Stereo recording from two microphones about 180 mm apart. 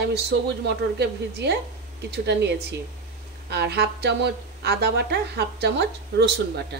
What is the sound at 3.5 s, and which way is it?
A woman's voice, 65° right (ahead or behind).